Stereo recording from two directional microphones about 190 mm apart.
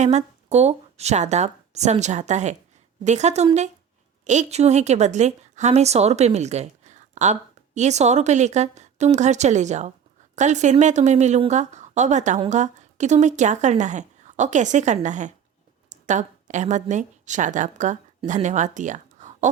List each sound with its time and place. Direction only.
0.0 s a woman's voice: 35° right (ahead or behind)